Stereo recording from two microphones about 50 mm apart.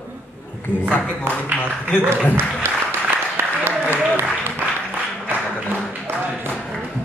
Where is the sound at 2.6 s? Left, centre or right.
Right.